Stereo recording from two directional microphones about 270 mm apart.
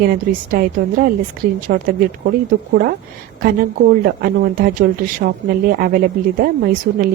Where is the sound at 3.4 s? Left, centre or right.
Right.